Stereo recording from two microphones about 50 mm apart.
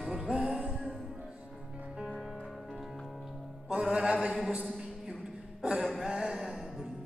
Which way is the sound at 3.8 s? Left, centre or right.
Right.